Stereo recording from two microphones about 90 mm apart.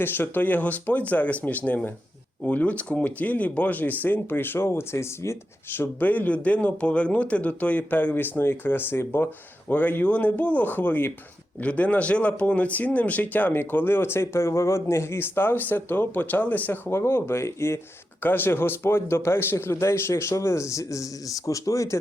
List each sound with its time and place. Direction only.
0.0 s speech: 20° left (ahead or behind)